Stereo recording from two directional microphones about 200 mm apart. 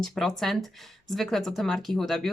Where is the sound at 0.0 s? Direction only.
Centre (ahead or behind).